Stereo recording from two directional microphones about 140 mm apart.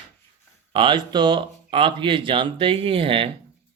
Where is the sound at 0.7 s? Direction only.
35° right (ahead or behind).